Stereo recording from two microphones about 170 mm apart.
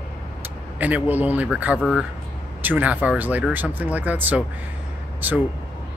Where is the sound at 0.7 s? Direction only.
10° right (ahead or behind).